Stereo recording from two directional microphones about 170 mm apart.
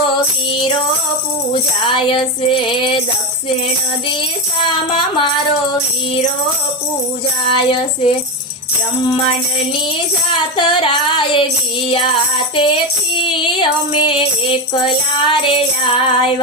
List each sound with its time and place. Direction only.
1.8 s music: 30° left (ahead or behind)
7.5 s music: 30° left (ahead or behind)
10.3 s music: 30° left (ahead or behind)